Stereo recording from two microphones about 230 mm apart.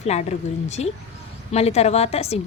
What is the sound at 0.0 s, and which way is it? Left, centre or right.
A woman's voice, left.